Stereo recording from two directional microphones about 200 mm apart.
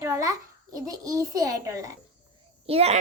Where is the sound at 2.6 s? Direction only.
30° right (ahead or behind).